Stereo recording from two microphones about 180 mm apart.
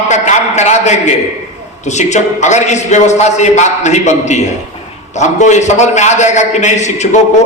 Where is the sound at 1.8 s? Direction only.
40° left (ahead or behind).